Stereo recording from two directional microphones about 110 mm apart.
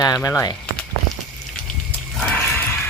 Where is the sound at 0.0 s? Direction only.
30° left (ahead or behind).